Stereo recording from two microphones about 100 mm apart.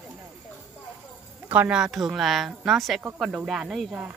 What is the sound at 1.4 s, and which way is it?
A woman's voice, 20° right (ahead or behind).